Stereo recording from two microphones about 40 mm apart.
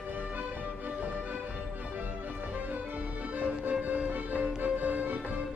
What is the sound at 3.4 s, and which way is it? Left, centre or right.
Music, right.